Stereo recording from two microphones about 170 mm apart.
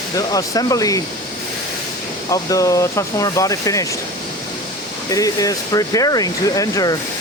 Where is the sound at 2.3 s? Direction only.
20° left (ahead or behind).